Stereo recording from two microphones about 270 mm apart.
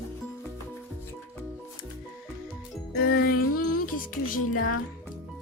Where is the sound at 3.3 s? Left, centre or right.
Left.